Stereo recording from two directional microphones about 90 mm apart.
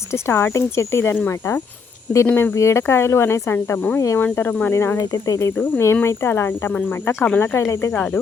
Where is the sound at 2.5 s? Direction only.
30° left (ahead or behind).